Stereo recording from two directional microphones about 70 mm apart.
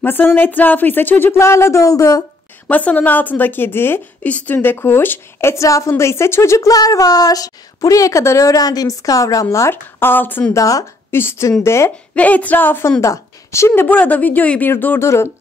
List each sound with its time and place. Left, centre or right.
0.0 s speech: left
1.4 s a woman's voice: left
2.7 s speech: left
4.2 s speech: left
5.5 s a woman's voice: left
6.7 s a woman's voice: left
10.5 s speech: left
11.1 s a woman's voice: left
12.2 s speech: left
13.0 s a woman's voice: left
13.8 s speech: left
15.0 s a woman's voice: left